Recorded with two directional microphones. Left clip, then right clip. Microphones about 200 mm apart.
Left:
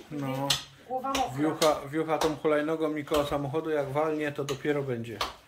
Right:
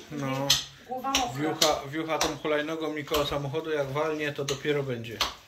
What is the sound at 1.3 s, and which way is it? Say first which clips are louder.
Speech: even; 20° left (ahead or behind).